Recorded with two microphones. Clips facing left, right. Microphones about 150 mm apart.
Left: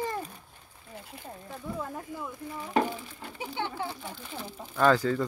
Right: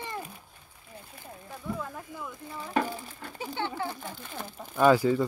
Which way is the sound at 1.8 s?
25° left (ahead or behind).